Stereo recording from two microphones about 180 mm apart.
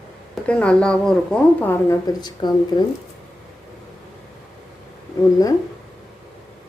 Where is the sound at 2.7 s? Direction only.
25° left (ahead or behind).